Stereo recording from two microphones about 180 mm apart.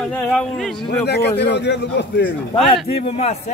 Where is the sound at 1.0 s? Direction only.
65° left (ahead or behind).